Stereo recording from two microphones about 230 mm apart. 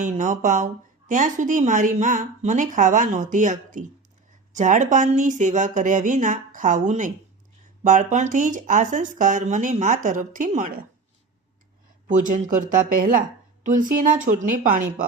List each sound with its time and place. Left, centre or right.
0.0 s speech: right
12.0 s speech: right